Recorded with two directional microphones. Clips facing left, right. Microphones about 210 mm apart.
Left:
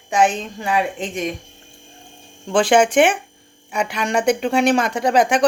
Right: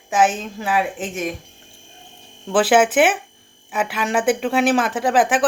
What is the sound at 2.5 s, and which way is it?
Speech, 5° right (ahead or behind).